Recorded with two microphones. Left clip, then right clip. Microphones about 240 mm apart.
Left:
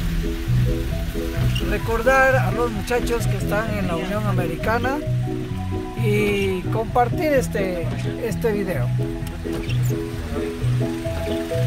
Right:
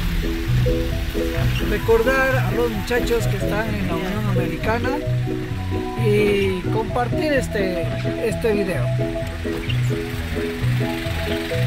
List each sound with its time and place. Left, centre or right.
1.7 s speech: centre
4.6 s speech: centre
6.0 s speech: centre